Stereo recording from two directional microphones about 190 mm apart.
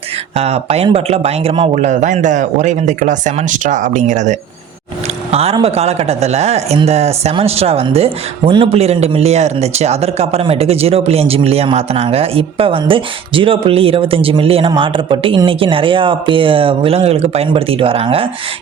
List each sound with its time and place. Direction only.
0.3 s speech: 35° right (ahead or behind)